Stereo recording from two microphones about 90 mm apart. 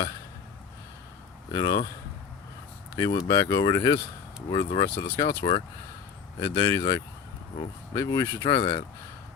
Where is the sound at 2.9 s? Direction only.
45° left (ahead or behind).